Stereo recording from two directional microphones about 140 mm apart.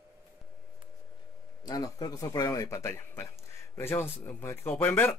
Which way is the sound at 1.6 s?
30° left (ahead or behind).